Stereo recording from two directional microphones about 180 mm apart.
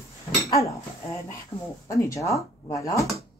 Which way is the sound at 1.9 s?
15° left (ahead or behind).